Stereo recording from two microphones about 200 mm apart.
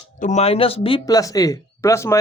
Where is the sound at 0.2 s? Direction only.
35° left (ahead or behind).